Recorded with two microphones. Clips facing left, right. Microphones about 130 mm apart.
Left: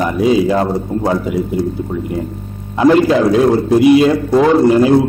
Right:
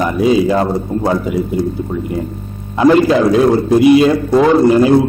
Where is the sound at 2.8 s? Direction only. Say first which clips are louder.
Even; 15° right (ahead or behind).